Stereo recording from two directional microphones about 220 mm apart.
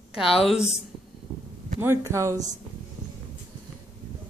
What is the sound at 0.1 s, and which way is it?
Speech, centre (ahead or behind).